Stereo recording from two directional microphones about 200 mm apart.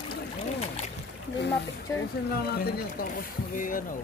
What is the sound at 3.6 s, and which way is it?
Speech, 45° left (ahead or behind).